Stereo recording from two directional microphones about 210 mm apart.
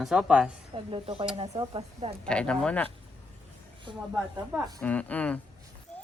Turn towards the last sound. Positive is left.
turn(degrees=10)  # may be behind; listen again after turning